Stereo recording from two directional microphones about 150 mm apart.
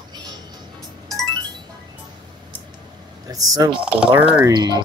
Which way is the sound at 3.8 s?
5° right (ahead or behind).